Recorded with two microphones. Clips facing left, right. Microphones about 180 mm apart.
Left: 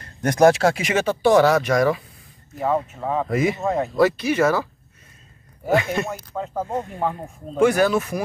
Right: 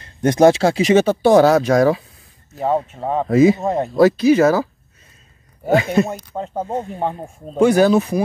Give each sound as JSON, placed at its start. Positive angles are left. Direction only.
{"t": 0.0, "sound": "speech", "side_deg": -25}
{"t": 5.7, "sound": "speech", "side_deg": -30}